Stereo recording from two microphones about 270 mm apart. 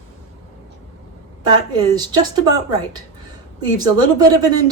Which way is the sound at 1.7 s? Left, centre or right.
Centre.